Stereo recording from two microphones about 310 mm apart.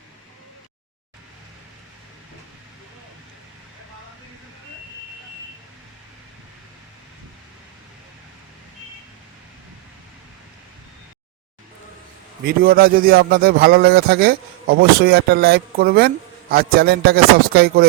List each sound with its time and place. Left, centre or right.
12.5 s speech: right